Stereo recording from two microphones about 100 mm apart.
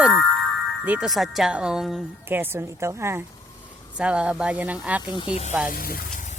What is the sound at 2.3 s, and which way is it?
Speech, 20° right (ahead or behind).